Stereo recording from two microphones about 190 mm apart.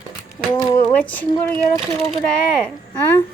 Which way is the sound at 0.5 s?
25° left (ahead or behind).